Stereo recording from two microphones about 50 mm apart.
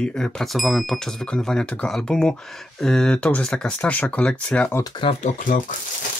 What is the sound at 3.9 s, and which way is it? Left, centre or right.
Speech, left.